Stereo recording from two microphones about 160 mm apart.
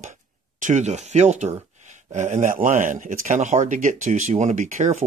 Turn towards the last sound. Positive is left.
turn(degrees=-50)  # may be behind; listen again after turning